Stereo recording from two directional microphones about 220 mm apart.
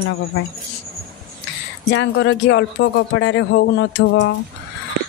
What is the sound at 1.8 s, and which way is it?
Speech, 55° left (ahead or behind).